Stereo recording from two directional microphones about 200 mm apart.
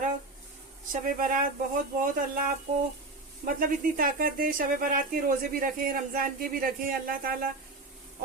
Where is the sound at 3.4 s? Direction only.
45° right (ahead or behind).